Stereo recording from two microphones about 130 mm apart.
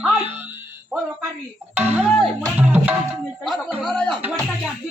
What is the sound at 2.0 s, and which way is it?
Music, 5° left (ahead or behind).